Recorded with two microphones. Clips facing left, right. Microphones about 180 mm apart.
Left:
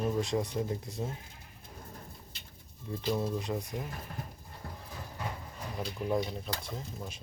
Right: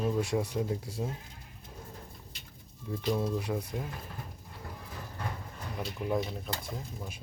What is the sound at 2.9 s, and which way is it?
Speech, 10° left (ahead or behind).